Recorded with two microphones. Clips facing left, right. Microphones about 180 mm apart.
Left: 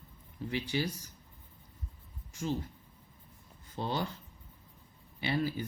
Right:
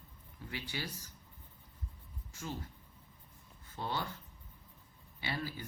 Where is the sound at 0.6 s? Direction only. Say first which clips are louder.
Left 9 dB; 15° left (ahead or behind).